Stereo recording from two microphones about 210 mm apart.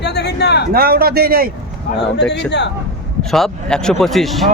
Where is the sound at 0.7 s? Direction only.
45° right (ahead or behind).